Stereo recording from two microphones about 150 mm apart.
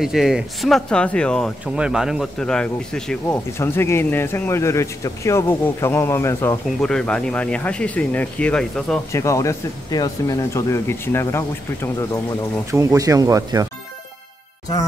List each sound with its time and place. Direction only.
0.0 s a man's voice: centre (ahead or behind)
3.5 s speech: 15° left (ahead or behind)
6.8 s speech: 5° left (ahead or behind)
9.1 s speech: 20° left (ahead or behind)
12.7 s speech: 20° right (ahead or behind)